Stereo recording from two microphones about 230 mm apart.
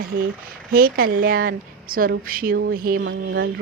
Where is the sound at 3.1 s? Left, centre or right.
Right.